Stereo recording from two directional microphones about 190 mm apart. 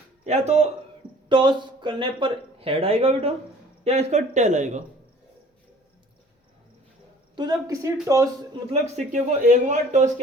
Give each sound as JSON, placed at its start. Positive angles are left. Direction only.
{"t": 0.3, "sound": "a man's voice", "side_deg": -35}
{"t": 7.3, "sound": "speech", "side_deg": -20}
{"t": 8.7, "sound": "a man's voice", "side_deg": -40}